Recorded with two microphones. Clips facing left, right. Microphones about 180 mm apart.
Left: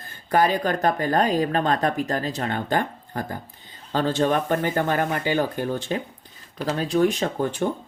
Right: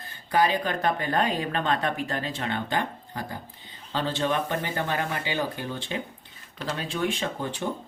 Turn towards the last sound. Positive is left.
turn(degrees=50)  # may be behind; listen again after turning